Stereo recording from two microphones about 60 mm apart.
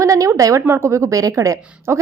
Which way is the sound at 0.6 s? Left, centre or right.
Right.